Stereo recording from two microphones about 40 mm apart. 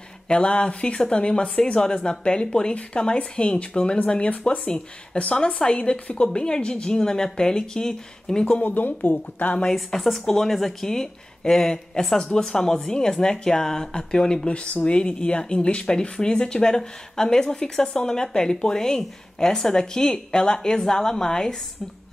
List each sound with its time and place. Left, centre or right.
0.3 s a woman's voice: left
8.6 s speech: left
10.2 s a woman's voice: centre